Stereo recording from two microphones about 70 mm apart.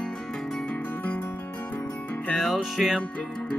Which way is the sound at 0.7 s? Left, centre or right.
Centre.